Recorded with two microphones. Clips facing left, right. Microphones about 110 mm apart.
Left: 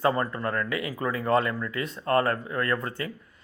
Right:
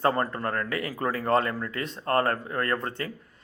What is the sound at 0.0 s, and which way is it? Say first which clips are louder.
Speech: even; 40° right (ahead or behind).